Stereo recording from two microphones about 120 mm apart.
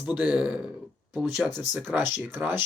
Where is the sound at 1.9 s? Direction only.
15° right (ahead or behind).